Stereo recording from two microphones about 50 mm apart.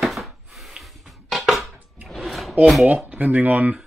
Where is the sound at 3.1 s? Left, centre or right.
Right.